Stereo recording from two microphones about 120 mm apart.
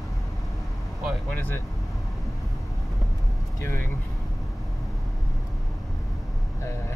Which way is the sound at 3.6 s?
20° left (ahead or behind).